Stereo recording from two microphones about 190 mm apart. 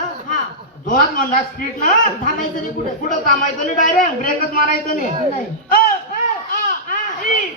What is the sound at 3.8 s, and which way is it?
Speech, 45° left (ahead or behind).